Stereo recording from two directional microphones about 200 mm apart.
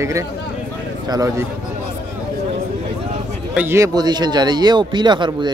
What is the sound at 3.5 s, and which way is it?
Speech, 10° right (ahead or behind).